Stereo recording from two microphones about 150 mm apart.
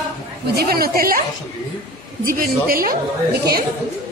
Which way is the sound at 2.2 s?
70° right (ahead or behind).